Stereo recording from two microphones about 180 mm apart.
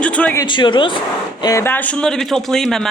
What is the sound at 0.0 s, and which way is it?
Speech, 5° left (ahead or behind).